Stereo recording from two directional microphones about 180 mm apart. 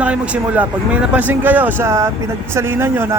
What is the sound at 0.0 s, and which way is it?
A man's voice, 10° right (ahead or behind).